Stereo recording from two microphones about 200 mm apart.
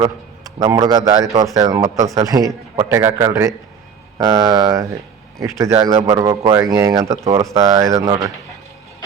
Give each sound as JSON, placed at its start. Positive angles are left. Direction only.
{"t": 0.0, "sound": "a man's voice", "side_deg": -20}